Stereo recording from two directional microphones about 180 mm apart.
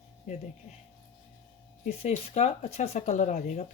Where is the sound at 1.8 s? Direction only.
35° left (ahead or behind).